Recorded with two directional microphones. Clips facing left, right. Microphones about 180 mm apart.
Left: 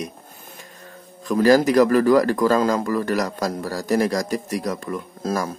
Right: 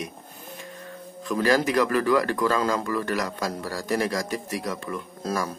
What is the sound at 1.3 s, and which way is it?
A man's voice, 40° left (ahead or behind).